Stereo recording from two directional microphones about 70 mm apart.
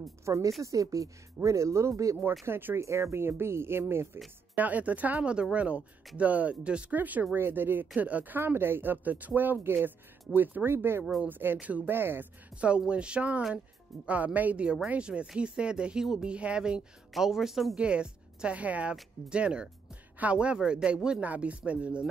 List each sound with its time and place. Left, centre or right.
0.2 s speech: right
2.4 s speech: right
4.6 s speech: right
11.9 s speech: right
12.5 s a woman's voice: centre
17.7 s speech: centre